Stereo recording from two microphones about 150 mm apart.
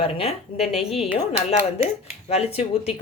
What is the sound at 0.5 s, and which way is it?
Speech, centre (ahead or behind).